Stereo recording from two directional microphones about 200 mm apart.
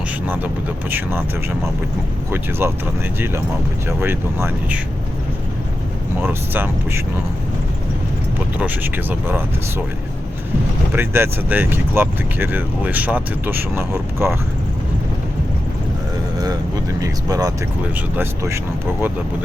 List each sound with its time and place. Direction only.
0.3 s speech: 10° right (ahead or behind)
2.3 s speech: 10° right (ahead or behind)
3.8 s speech: 10° right (ahead or behind)
6.1 s speech: 10° right (ahead or behind)
8.5 s speech: 10° right (ahead or behind)
10.9 s speech: 10° right (ahead or behind)
17.0 s speech: 15° right (ahead or behind)